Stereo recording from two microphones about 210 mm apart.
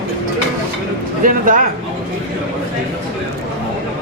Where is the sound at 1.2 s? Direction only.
40° right (ahead or behind).